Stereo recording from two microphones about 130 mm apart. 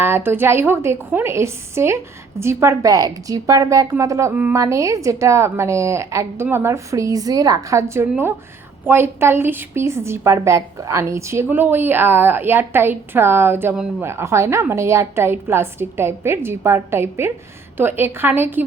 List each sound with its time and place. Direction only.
0.0 s a woman's voice: 15° right (ahead or behind)